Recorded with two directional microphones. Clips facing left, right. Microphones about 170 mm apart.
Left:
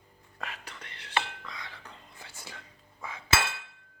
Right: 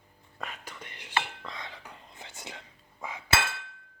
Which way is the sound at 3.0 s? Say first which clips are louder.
Right 2 dB; 15° right (ahead or behind).